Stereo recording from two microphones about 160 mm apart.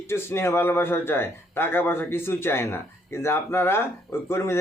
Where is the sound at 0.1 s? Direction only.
15° left (ahead or behind).